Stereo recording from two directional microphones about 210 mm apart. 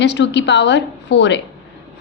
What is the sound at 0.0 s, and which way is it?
A woman's voice, 55° left (ahead or behind).